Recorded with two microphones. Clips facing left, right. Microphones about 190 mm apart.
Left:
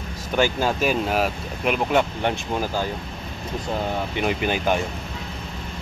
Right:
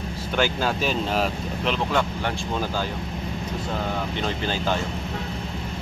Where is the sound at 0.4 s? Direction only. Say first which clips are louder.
Left 3 dB; 10° left (ahead or behind).